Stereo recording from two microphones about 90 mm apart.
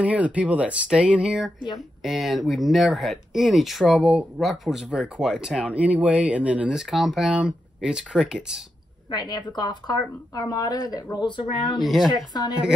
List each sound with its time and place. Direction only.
0.0 s speech: 15° right (ahead or behind)
6.8 s speech: centre (ahead or behind)
9.1 s a woman's voice: 50° left (ahead or behind)
11.8 s speech: centre (ahead or behind)
12.3 s a woman's voice: 50° left (ahead or behind)